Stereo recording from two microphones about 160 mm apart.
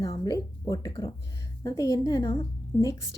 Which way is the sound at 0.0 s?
25° left (ahead or behind).